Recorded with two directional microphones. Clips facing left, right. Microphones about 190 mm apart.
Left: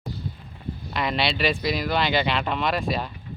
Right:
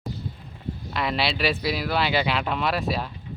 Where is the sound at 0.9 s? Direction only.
Centre (ahead or behind).